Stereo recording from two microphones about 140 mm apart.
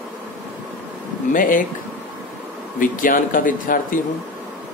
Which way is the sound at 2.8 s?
75° left (ahead or behind).